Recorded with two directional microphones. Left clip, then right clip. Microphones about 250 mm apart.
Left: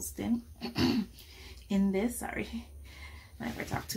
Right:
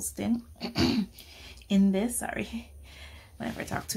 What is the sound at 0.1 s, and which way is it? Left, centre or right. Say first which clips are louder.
Speech: right 2 dB; right.